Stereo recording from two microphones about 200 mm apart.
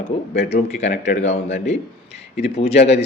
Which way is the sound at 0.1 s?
30° left (ahead or behind).